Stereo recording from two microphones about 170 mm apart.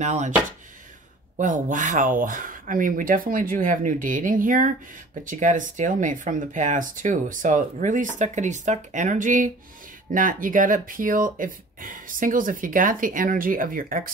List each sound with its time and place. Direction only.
0.0 s speech: 45° right (ahead or behind)
1.3 s speech: 50° right (ahead or behind)